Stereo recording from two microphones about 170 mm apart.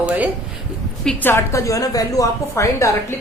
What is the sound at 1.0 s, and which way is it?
A woman's voice, 10° left (ahead or behind).